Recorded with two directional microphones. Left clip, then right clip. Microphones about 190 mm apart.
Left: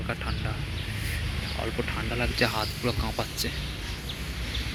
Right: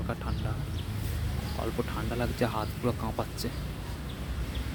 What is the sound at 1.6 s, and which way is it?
Speech, 5° right (ahead or behind).